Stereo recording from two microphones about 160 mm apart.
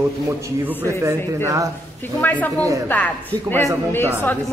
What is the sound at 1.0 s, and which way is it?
Speech, 20° right (ahead or behind).